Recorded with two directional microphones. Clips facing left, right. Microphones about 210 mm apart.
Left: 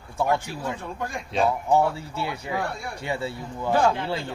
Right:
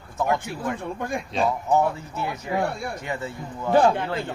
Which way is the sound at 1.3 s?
Centre (ahead or behind).